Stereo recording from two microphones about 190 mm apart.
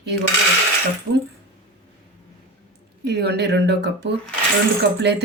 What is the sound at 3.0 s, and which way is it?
Speech, 60° right (ahead or behind).